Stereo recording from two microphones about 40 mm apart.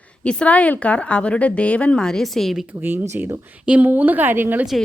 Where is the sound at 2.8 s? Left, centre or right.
Right.